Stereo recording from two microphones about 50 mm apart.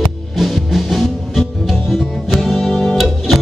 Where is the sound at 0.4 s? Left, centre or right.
Centre.